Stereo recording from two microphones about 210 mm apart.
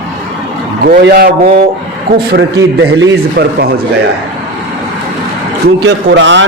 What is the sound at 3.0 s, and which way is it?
Speech, 45° right (ahead or behind).